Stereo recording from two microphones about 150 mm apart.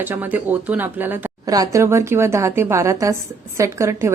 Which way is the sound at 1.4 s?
25° right (ahead or behind).